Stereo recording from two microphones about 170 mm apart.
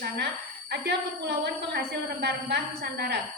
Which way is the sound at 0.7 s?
80° right.